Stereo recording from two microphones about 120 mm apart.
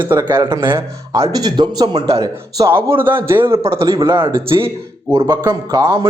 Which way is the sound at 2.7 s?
20° right (ahead or behind).